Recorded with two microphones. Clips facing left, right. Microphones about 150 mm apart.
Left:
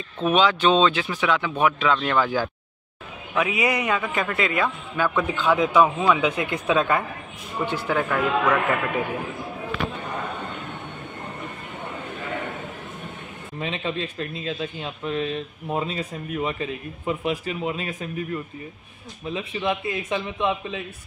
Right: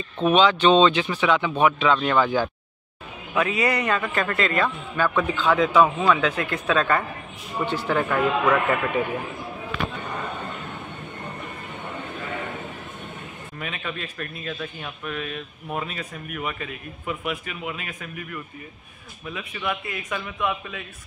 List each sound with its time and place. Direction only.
0.2 s speech: 5° left (ahead or behind)
3.3 s a man's voice: 10° left (ahead or behind)
8.0 s speech: centre (ahead or behind)
13.6 s speech: 25° left (ahead or behind)